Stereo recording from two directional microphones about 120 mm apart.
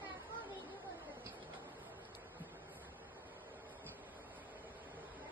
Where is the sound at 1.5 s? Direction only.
15° right (ahead or behind).